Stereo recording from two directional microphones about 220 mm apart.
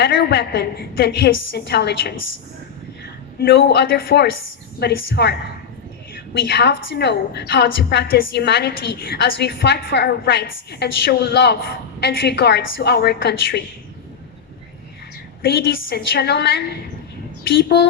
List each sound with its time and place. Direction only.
0.0 s a woman's voice: 45° left (ahead or behind)
3.3 s a woman's voice: 45° left (ahead or behind)
15.4 s a woman's voice: 45° left (ahead or behind)